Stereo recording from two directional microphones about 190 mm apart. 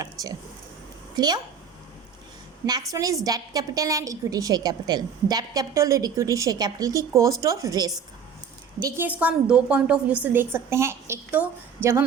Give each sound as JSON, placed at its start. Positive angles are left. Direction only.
{"t": 0.0, "sound": "a sound", "side_deg": -20}
{"t": 1.1, "sound": "a woman's voice", "side_deg": -20}
{"t": 2.9, "sound": "a woman's voice", "side_deg": -20}